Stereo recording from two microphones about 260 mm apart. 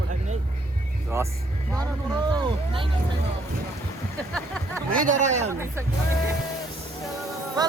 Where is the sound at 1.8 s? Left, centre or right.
Centre.